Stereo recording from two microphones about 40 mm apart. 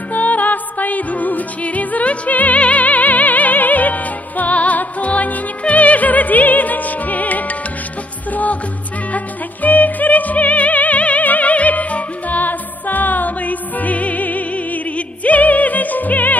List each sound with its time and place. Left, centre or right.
0.1 s music: left